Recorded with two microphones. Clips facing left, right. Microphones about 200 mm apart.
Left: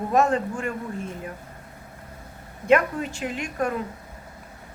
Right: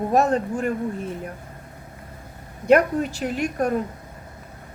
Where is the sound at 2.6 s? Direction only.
40° right (ahead or behind).